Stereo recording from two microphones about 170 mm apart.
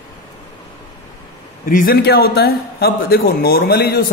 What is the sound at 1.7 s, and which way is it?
Speech, 55° left (ahead or behind).